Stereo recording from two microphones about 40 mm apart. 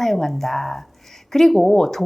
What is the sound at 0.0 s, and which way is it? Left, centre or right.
Speech, centre.